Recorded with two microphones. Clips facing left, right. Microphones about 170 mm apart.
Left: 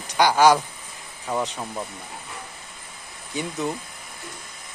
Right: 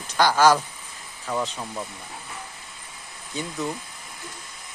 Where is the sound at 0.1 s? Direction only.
15° left (ahead or behind).